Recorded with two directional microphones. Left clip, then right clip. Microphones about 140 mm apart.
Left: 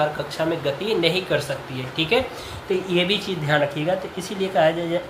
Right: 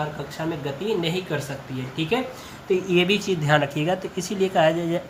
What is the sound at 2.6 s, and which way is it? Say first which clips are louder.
Speech: right 1 dB; 25° right (ahead or behind).